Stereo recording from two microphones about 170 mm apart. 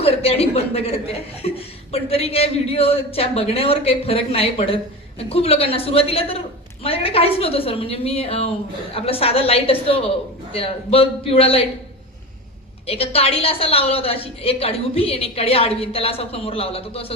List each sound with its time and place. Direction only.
0.0 s speech: 35° left (ahead or behind)
12.9 s speech: 35° left (ahead or behind)